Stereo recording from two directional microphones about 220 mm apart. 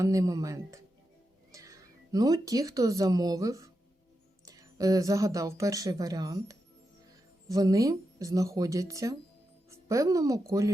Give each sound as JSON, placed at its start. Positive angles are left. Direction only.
{"t": 0.0, "sound": "a woman's voice", "side_deg": -15}